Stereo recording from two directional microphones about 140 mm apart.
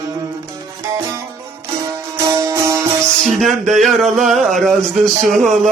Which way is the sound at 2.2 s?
20° right (ahead or behind).